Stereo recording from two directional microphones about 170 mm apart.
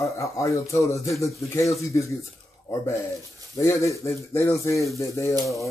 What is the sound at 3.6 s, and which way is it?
A man's voice, 15° left (ahead or behind).